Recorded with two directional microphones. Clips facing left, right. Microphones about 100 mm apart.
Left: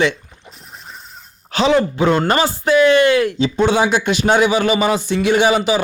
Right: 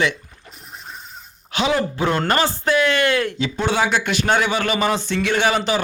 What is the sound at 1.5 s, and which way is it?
A man's voice, 25° left (ahead or behind).